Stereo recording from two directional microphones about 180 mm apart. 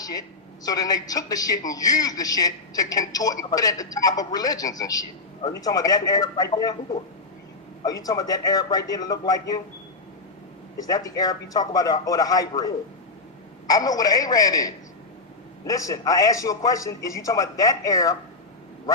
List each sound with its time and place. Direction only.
0.0 s a man's voice: 20° left (ahead or behind)
7.9 s a man's voice: 20° left (ahead or behind)
10.8 s a man's voice: 20° left (ahead or behind)